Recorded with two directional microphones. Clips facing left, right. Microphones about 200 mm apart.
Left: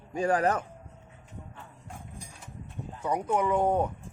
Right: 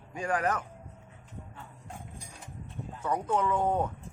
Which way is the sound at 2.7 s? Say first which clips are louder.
Left 2 dB; 15° left (ahead or behind).